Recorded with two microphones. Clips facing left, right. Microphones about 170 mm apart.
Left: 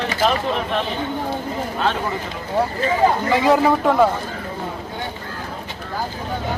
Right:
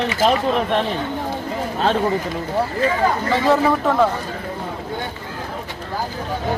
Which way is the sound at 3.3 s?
10° left (ahead or behind).